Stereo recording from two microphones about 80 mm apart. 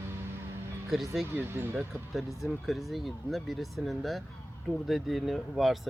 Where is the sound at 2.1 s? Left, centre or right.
Centre.